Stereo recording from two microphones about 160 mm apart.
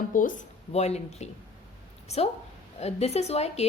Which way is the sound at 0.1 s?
55° left (ahead or behind).